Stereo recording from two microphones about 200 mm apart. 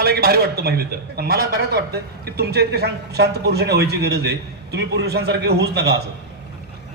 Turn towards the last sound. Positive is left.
turn(degrees=-55)  # may be behind; listen again after turning